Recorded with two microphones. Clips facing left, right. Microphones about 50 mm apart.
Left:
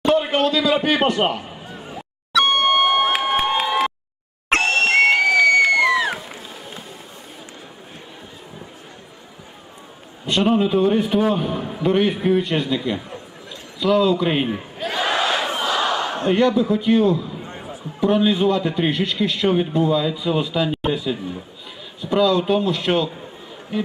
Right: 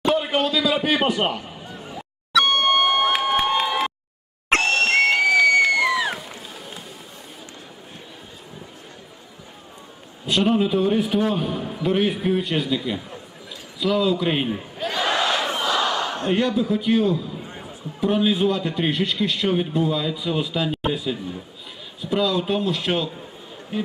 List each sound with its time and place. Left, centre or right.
0.0 s a sound: centre
2.4 s a sound: left
3.1 s crowd: centre
4.6 s crowd: left
6.1 s music: centre
10.2 s a man's voice: centre
14.8 s battle cry: centre
16.0 s a man's voice: centre
17.4 s a sound: centre
18.0 s a man's voice: centre